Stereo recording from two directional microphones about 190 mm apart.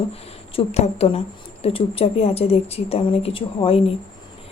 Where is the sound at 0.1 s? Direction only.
30° left (ahead or behind).